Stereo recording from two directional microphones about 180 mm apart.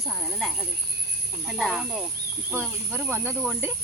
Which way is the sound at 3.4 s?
5° right (ahead or behind).